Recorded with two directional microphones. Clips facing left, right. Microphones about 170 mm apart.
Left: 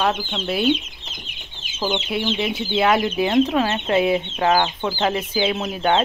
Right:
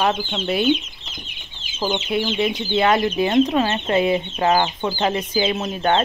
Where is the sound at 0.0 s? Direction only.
Centre (ahead or behind).